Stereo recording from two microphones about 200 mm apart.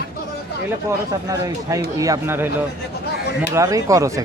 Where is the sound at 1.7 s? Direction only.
15° right (ahead or behind).